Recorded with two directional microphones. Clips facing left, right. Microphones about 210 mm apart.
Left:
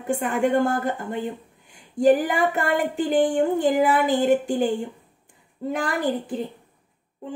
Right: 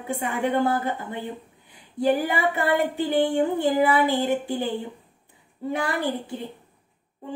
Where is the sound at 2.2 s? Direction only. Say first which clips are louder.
Left 1 dB; 45° left (ahead or behind).